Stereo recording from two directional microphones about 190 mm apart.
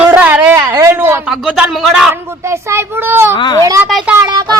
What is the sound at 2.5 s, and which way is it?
Speech, 15° right (ahead or behind).